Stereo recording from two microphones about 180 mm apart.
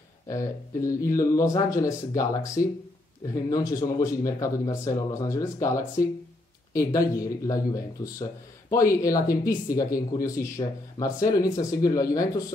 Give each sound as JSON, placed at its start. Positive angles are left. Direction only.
{"t": 0.3, "sound": "speech", "side_deg": 15}